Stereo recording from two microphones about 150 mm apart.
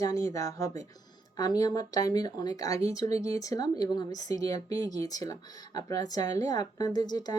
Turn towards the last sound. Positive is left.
turn(degrees=25)  # may be behind; listen again after turning